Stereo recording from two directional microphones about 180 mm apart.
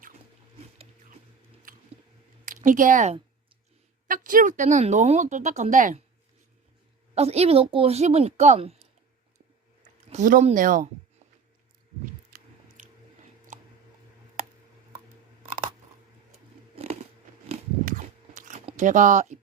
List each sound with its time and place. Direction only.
2.5 s speech: 45° right (ahead or behind)
7.1 s a woman's voice: 35° right (ahead or behind)
10.1 s speech: 45° right (ahead or behind)
12.3 s biting: 45° right (ahead or behind)
16.7 s biting: 35° right (ahead or behind)
17.8 s a sound: 45° right (ahead or behind)